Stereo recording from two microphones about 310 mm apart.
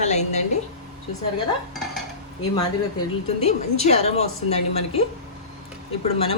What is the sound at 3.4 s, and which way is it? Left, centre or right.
A woman's voice, left.